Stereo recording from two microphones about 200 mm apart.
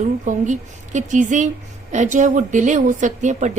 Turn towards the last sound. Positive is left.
turn(degrees=-35)  # may be behind; listen again after turning